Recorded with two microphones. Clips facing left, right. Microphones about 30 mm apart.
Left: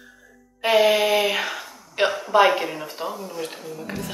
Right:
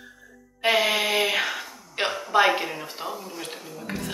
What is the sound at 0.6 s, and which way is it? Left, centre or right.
Speech, centre.